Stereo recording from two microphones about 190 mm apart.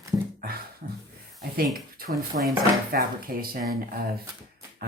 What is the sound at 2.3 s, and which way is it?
Speech, 50° right (ahead or behind).